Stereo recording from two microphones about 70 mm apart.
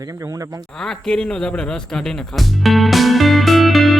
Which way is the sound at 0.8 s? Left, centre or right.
Centre.